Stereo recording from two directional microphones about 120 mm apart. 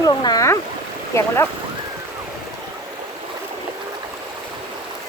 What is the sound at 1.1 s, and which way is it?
Speech, 25° left (ahead or behind).